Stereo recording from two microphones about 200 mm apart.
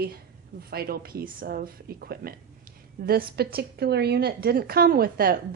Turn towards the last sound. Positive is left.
turn(degrees=-50)  # may be behind; listen again after turning